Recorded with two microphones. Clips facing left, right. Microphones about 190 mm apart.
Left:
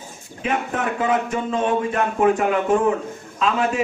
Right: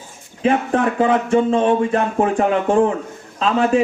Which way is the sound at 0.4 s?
30° right (ahead or behind).